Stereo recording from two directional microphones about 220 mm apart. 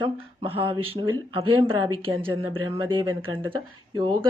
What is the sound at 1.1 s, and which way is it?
Speech, 90° right.